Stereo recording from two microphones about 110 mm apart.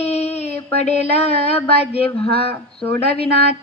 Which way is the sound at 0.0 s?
70° left (ahead or behind).